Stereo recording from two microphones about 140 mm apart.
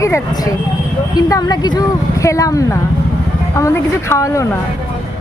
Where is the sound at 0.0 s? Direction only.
25° left (ahead or behind).